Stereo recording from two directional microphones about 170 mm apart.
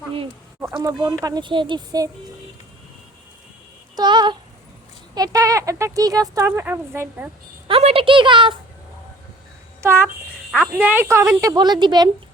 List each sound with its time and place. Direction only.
0.8 s speech: 20° right (ahead or behind)
3.9 s a sound: 25° right (ahead or behind)
5.1 s speech: 20° right (ahead or behind)
7.7 s speech: 35° right (ahead or behind)
9.8 s a child's voice: 15° right (ahead or behind)